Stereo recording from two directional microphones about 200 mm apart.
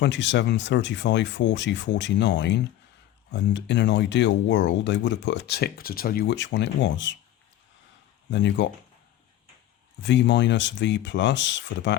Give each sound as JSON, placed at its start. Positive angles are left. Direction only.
{"t": 0.0, "sound": "speech", "side_deg": 65}
{"t": 8.3, "sound": "speech", "side_deg": 60}
{"t": 10.0, "sound": "speech", "side_deg": 60}